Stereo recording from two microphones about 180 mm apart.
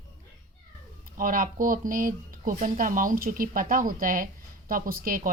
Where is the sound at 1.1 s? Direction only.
50° right (ahead or behind).